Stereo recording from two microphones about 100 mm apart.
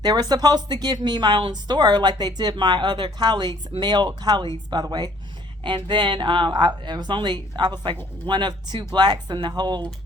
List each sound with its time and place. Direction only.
0.0 s speech: 45° right (ahead or behind)